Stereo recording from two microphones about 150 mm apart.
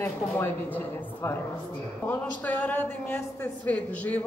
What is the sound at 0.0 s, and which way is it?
A woman's voice, 15° left (ahead or behind).